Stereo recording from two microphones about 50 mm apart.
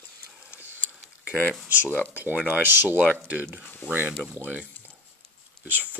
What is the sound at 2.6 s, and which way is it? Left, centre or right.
Speech, right.